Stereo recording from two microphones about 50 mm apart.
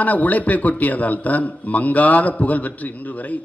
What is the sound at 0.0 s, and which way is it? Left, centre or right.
A man's voice, left.